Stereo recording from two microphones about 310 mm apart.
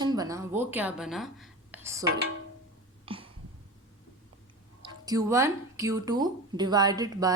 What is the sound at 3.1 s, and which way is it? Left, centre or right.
Cough, centre.